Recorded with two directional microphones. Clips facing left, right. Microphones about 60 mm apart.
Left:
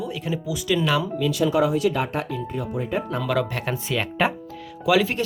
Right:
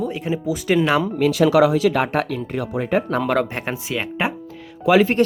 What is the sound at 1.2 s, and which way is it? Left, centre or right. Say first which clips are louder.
Speech: right 7 dB; right.